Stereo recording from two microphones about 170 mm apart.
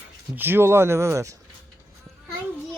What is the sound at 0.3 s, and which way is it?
Speech, 10° right (ahead or behind).